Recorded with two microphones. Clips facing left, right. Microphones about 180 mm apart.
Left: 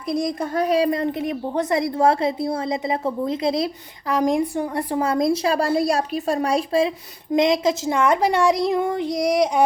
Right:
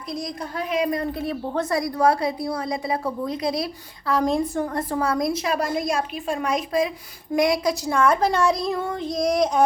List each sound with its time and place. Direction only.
0.1 s a woman's voice: 50° left (ahead or behind); by 3.7 s 25° left (ahead or behind)
4.1 s a woman's voice: 15° left (ahead or behind)
8.6 s child singing: 15° left (ahead or behind)